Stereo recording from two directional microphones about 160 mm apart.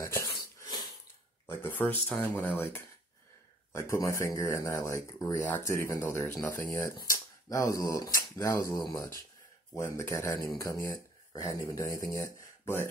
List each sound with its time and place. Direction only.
0.0 s dog: 20° left (ahead or behind)
1.6 s speech: 10° left (ahead or behind)